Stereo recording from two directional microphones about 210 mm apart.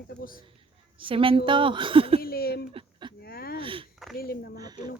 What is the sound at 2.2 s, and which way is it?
Speech, 45° left (ahead or behind).